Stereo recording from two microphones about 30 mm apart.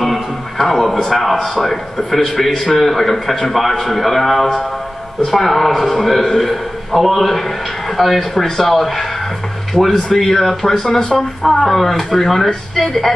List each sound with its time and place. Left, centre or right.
0.0 s music: centre
1.1 s a man's voice: centre
9.8 s speech: left
10.1 s speech: centre